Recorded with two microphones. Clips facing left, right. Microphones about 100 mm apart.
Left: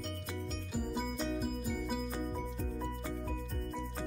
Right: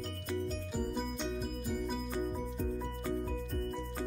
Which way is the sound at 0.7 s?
Centre (ahead or behind).